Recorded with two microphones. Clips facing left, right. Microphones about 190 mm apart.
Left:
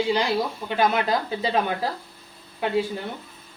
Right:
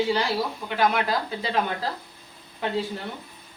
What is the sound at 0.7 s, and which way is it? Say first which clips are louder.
Speech: left 2 dB; 20° left (ahead or behind).